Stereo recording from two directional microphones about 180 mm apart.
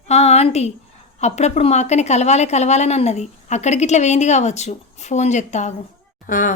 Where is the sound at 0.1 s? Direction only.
35° left (ahead or behind).